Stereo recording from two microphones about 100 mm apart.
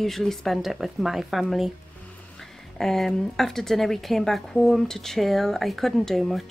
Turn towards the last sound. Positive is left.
turn(degrees=0)  # may be behind; listen again after turning